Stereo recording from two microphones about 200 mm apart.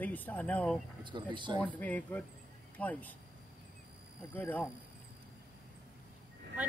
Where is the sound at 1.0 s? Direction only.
25° right (ahead or behind).